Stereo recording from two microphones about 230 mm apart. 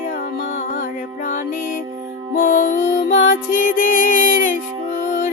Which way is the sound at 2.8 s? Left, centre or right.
Left.